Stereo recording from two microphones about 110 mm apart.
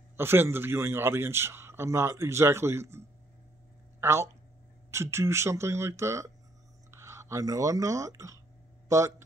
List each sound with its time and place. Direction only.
0.2 s a man's voice: 20° right (ahead or behind)
4.0 s a man's voice: 25° right (ahead or behind)